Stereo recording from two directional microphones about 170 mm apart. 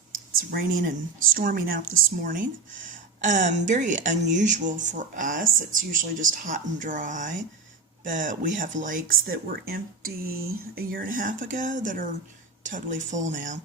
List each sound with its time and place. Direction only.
0.3 s speech: 55° right (ahead or behind)